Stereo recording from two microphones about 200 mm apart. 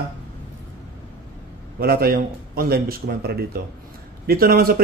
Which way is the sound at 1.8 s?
50° right (ahead or behind).